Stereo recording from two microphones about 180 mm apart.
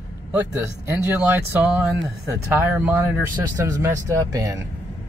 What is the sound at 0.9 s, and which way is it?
Speech, 10° right (ahead or behind).